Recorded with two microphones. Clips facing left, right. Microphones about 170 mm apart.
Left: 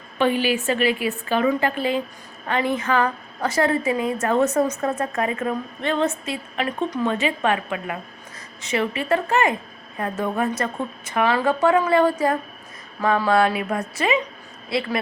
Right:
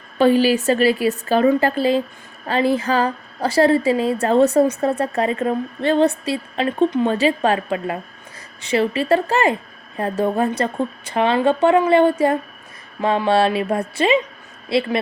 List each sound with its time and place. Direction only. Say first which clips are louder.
0.2 s a woman's voice: right 6 dB; 35° right (ahead or behind)